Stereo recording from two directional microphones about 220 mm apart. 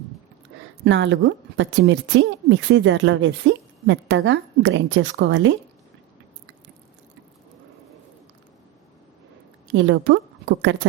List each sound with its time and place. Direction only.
0.9 s a woman's voice: 55° right (ahead or behind)
9.7 s a woman's voice: 55° right (ahead or behind)